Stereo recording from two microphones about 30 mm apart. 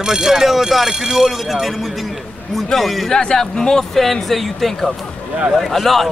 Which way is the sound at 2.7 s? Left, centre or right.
Centre.